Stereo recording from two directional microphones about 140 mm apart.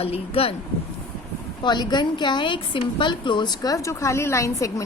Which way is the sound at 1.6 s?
30° left (ahead or behind).